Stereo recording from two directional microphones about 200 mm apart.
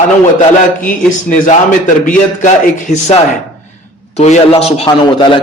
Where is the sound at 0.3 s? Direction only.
45° left (ahead or behind).